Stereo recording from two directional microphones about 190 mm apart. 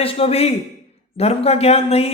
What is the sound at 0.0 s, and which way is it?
A man's voice, 30° left (ahead or behind).